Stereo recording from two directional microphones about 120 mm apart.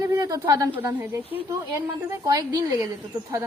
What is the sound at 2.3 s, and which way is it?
Speech, 30° right (ahead or behind).